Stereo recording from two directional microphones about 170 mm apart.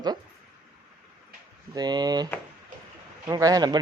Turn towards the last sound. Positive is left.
turn(degrees=-25)  # may be behind; listen again after turning